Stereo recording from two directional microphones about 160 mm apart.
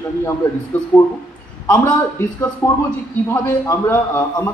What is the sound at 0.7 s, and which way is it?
A man's voice, 10° left (ahead or behind).